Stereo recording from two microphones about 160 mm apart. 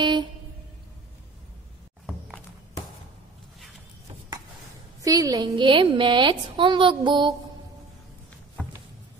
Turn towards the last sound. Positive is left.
turn(degrees=-30)  # may be behind; listen again after turning